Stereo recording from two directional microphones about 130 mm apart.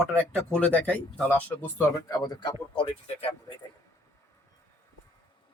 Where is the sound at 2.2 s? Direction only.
30° left (ahead or behind).